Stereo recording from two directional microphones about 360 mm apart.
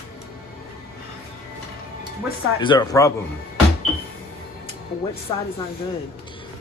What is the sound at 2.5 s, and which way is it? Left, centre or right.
Speech, centre.